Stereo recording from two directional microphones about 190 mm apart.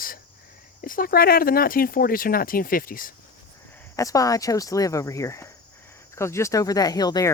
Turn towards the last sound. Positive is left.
turn(degrees=20)  # may be behind; listen again after turning